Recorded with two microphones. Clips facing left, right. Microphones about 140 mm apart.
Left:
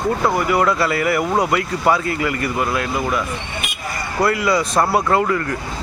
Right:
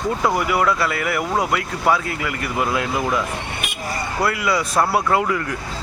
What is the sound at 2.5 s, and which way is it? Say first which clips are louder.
Speech: left 1 dB; 20° right (ahead or behind).